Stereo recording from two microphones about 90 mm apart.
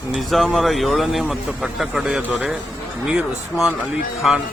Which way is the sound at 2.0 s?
15° right (ahead or behind).